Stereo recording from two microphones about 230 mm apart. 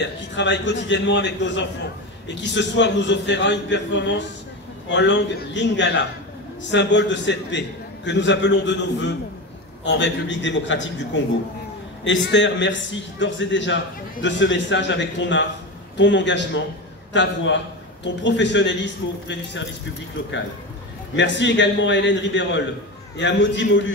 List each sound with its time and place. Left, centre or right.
0.4 s a man's voice: left
21.2 s a man's voice: left